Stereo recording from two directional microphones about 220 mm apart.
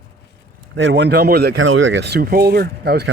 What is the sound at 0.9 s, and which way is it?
Speech, 50° right (ahead or behind).